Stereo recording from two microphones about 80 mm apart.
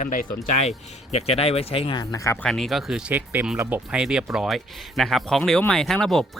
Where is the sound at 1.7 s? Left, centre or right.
Left.